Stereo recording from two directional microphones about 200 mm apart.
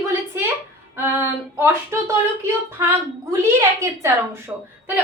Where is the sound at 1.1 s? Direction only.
10° right (ahead or behind).